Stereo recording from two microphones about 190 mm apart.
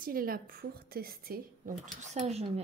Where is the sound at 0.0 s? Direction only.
50° right (ahead or behind).